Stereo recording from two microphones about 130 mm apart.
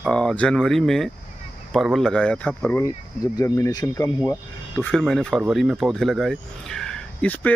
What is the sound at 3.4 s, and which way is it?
Speech, 25° left (ahead or behind).